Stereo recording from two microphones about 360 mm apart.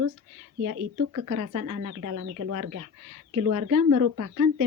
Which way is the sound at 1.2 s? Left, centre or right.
Right.